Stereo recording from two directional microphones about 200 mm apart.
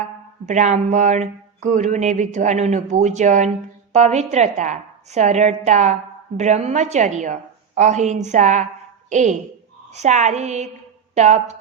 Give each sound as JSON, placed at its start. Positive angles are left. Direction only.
{"t": 0.0, "sound": "speech", "side_deg": -35}